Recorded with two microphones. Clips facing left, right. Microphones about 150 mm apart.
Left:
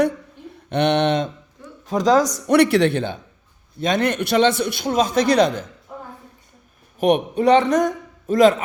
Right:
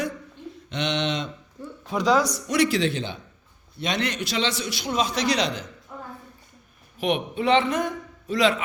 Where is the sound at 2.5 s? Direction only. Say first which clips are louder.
Left 8 dB; 60° left (ahead or behind).